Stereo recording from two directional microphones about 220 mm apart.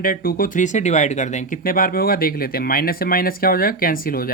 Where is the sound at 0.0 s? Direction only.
40° left (ahead or behind).